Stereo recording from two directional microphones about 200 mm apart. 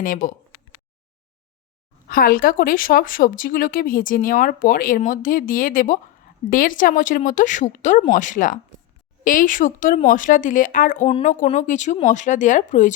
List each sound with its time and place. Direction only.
0.0 s a woman's voice: 40° left (ahead or behind)
2.0 s a woman's voice: 45° left (ahead or behind)